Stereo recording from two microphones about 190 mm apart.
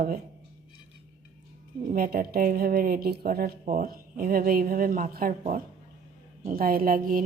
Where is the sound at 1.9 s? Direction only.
50° right (ahead or behind).